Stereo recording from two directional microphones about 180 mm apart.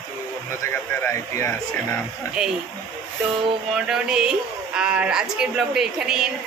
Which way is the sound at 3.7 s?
5° right (ahead or behind).